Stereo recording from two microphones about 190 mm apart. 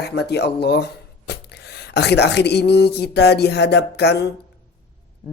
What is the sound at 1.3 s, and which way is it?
Speech, 60° left (ahead or behind).